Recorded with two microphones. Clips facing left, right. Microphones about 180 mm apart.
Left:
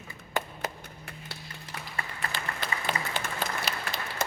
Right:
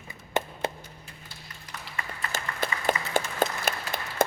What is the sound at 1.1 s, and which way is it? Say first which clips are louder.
Clip-clop: left 5 dB; 65° left (ahead or behind).